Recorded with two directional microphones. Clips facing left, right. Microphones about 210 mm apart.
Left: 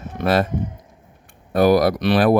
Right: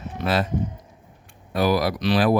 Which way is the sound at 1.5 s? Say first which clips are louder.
Left 6 dB; 50° left (ahead or behind).